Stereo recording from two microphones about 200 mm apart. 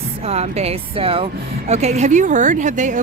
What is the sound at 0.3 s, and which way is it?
A woman's voice, 30° right (ahead or behind).